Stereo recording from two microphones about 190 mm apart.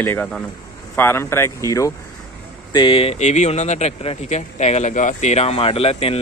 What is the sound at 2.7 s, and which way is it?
Speech, 25° left (ahead or behind).